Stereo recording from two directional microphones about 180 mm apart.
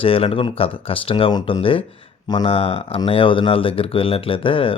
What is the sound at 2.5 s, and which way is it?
Speech, 35° left (ahead or behind).